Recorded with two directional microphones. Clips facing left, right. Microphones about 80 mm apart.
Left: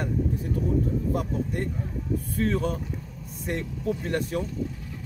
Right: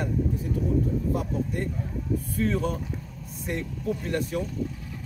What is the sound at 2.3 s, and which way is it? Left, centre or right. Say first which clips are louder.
Speech: left 1 dB; left.